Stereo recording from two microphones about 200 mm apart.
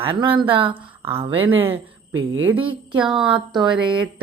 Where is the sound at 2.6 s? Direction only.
25° right (ahead or behind).